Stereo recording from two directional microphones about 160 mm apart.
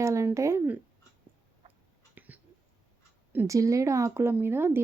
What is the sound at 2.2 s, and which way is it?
Whispering, 10° right (ahead or behind).